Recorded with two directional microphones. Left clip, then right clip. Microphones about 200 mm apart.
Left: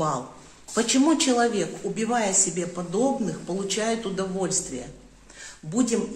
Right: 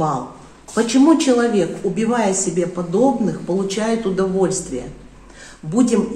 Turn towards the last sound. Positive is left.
turn(degrees=10)  # may be behind; listen again after turning